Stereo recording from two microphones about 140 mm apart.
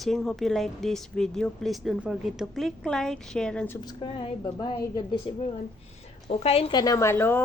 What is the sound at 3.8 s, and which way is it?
A woman's voice, 35° left (ahead or behind).